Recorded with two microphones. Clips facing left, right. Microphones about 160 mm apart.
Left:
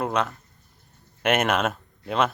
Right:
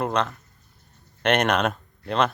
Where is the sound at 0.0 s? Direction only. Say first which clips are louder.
Right 1 dB; 5° left (ahead or behind).